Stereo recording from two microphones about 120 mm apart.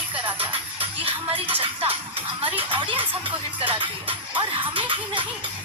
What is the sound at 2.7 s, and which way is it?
Speech, 40° right (ahead or behind).